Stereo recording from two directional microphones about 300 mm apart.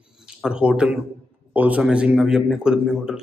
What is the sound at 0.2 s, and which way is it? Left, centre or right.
A man's voice, centre.